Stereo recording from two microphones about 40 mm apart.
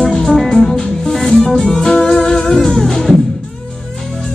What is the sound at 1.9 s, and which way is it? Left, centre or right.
Music, centre.